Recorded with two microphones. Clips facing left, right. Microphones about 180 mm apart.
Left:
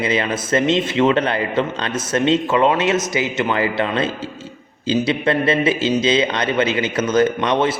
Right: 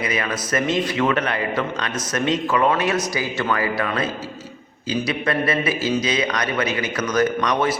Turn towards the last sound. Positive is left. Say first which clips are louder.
# left 3 dB
turn(degrees=25)  # may be behind; listen again after turning